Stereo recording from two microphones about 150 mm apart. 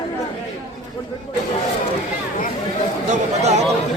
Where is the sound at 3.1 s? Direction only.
50° right (ahead or behind).